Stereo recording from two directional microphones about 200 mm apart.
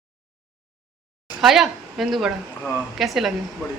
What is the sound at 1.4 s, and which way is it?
A woman's voice, centre (ahead or behind).